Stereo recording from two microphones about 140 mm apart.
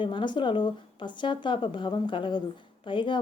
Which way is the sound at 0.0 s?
35° left (ahead or behind).